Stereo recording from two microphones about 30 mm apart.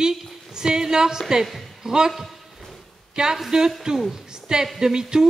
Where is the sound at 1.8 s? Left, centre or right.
Right.